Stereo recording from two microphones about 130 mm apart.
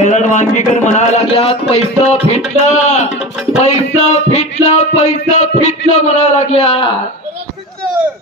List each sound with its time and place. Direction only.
0.0 s music: 65° left (ahead or behind); by 7.0 s 50° left (ahead or behind)